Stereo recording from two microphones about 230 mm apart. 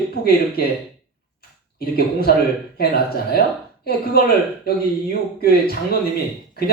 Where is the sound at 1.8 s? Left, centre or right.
Left.